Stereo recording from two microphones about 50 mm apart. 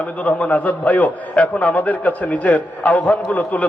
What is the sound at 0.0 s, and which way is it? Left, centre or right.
A man's voice, left.